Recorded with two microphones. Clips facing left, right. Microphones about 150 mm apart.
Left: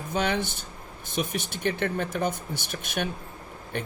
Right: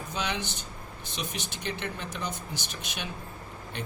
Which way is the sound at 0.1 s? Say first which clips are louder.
Left 7 dB; 50° left (ahead or behind).